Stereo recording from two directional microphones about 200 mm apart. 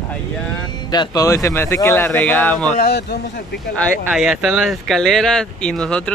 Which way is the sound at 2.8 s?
55° left (ahead or behind).